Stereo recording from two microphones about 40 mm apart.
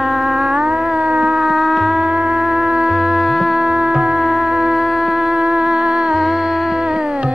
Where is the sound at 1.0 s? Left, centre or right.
Right.